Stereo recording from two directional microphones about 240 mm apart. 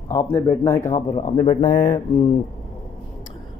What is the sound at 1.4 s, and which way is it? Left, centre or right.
Speech, left.